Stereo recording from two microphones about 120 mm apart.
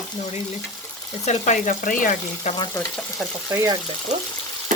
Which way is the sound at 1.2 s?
80° left.